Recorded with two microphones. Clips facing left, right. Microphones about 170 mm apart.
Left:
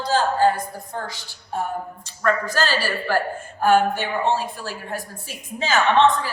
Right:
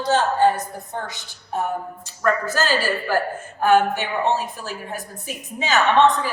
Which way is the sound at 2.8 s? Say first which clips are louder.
Right 1 dB; 15° right (ahead or behind).